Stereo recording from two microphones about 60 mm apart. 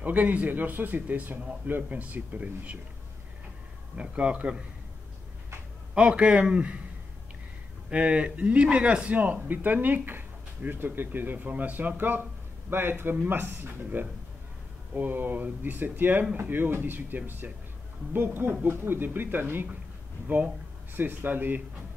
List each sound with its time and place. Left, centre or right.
0.0 s speech: right
3.9 s speech: centre
5.9 s a man's voice: centre
7.9 s speech: centre; by 13.7 s right
15.0 s speech: right